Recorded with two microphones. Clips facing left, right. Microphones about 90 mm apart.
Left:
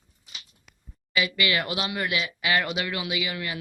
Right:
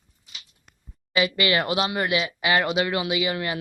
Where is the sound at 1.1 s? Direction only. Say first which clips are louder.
Right 4 dB; 30° right (ahead or behind).